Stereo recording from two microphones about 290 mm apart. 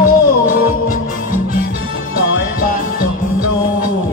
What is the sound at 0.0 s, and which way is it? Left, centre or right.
Music, left.